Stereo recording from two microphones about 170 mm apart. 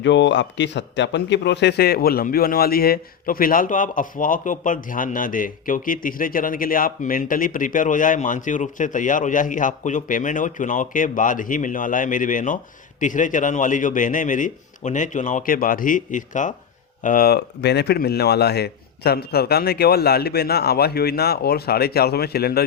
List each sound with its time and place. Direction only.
0.0 s a man's voice: 90° left; by 22.6 s 65° left (ahead or behind)